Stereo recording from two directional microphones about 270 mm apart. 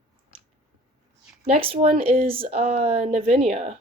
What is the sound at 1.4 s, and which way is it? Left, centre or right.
Speech, right.